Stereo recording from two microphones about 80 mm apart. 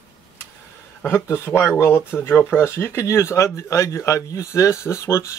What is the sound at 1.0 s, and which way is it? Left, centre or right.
Speech, left.